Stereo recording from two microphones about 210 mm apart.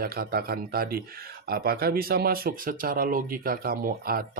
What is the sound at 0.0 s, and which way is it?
Speech, 45° right (ahead or behind).